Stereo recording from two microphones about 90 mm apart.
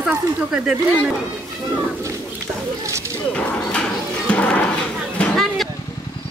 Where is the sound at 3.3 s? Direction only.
10° left (ahead or behind).